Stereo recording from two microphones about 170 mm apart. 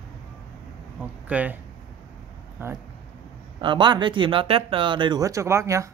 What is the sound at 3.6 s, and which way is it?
Speech, 30° right (ahead or behind).